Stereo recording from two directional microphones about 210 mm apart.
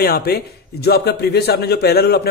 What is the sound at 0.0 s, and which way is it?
A man's voice, 45° left (ahead or behind).